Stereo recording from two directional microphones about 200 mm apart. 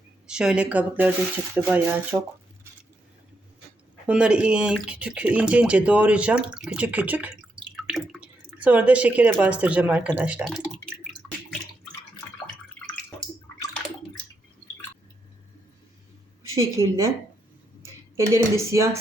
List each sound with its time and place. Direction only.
0.3 s speech: 5° right (ahead or behind)
4.0 s speech: 5° right (ahead or behind)
11.2 s a sound: 5° left (ahead or behind)
16.6 s speech: 15° right (ahead or behind)